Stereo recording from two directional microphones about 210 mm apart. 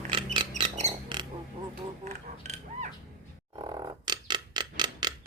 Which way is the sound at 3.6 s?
20° right (ahead or behind).